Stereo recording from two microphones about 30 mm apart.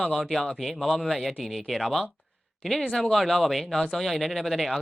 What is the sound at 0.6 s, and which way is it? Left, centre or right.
Speech, centre.